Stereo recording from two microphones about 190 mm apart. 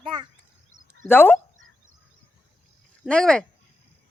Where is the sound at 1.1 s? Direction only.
10° left (ahead or behind).